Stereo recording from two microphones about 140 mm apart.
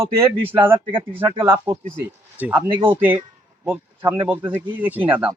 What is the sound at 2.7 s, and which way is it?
Speech, 35° right (ahead or behind).